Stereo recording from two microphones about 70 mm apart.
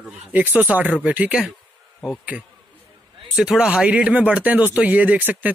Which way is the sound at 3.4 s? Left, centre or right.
Centre.